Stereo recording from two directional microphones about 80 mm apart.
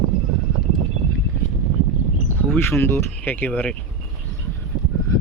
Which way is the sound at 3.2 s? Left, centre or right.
Left.